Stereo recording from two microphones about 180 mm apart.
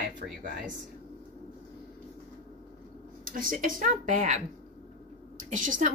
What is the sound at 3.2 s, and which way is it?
Speech, 50° right (ahead or behind).